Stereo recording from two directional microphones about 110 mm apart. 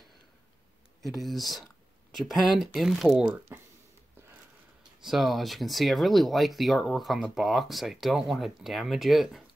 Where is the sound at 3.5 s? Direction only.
20° right (ahead or behind).